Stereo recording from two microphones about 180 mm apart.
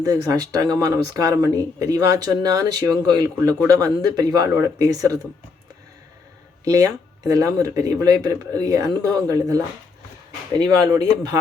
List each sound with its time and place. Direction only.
0.0 s speech: 20° right (ahead or behind)
6.7 s speech: 20° right (ahead or behind)